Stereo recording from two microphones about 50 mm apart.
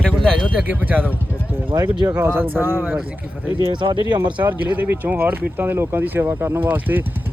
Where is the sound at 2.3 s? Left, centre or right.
Right.